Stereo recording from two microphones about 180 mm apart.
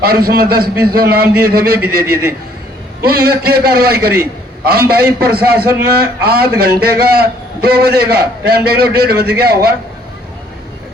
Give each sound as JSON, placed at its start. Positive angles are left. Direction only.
{"t": 0.0, "sound": "a man's voice", "side_deg": -55}